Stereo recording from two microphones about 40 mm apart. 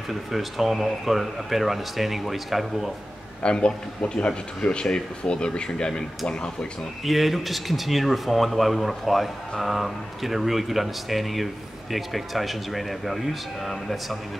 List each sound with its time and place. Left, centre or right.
0.1 s speech: centre
3.4 s speech: left
7.1 s speech: centre